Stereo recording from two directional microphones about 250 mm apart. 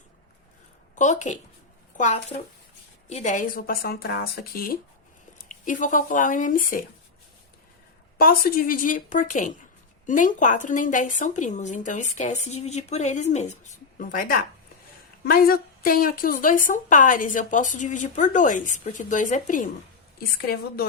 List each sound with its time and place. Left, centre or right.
0.9 s a woman's voice: left
8.2 s a woman's voice: left